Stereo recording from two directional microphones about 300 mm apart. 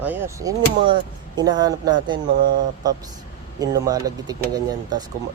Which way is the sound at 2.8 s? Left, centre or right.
Centre.